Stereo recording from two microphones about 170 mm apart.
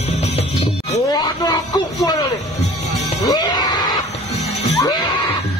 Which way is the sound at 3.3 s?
25° left (ahead or behind).